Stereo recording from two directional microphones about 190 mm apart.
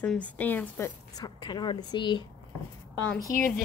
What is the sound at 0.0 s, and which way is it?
A woman's voice, 10° left (ahead or behind).